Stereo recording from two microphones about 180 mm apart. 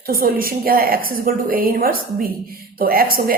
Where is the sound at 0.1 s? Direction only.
55° right (ahead or behind).